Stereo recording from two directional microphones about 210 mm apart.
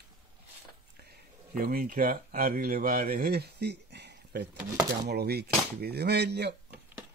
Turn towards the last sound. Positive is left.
turn(degrees=-50)  # may be behind; listen again after turning